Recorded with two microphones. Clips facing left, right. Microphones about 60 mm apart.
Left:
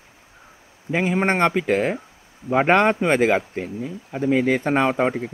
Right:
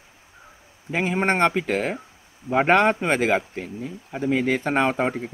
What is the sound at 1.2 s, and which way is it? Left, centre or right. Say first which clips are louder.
Speech: right 1 dB; left.